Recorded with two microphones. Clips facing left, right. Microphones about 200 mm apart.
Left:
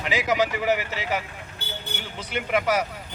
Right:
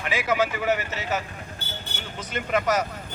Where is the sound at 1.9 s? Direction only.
60° left (ahead or behind).